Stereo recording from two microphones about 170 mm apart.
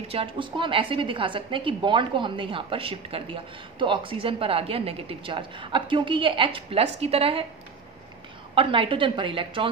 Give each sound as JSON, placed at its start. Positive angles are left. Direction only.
{"t": 0.1, "sound": "a woman's voice", "side_deg": -35}
{"t": 8.5, "sound": "a woman's voice", "side_deg": -30}